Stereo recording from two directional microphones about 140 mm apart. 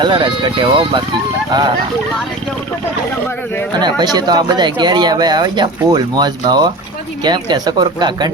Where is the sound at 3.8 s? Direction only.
30° right (ahead or behind).